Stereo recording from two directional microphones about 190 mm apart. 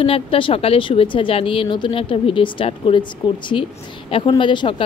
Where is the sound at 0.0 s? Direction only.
30° left (ahead or behind).